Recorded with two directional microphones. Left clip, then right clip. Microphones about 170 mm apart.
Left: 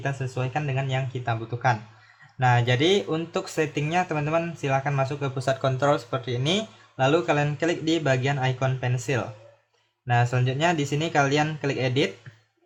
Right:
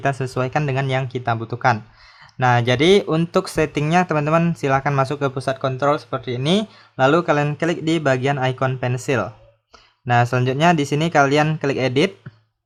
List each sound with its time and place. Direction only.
0.0 s speech: 45° right (ahead or behind)
5.3 s speech: 30° right (ahead or behind)